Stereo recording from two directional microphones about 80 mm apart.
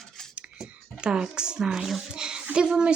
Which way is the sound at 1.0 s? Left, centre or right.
Centre.